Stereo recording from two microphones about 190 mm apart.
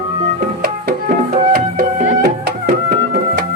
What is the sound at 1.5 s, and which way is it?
Music, 55° right (ahead or behind).